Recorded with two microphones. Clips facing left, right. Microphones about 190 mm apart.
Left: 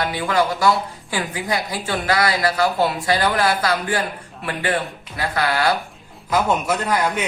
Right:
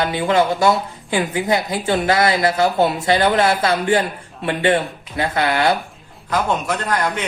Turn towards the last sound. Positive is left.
turn(degrees=10)  # may be behind; listen again after turning